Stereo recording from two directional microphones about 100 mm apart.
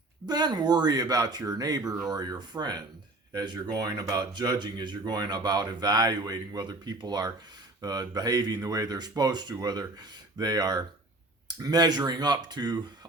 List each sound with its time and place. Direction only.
0.3 s speech: 45° right (ahead or behind)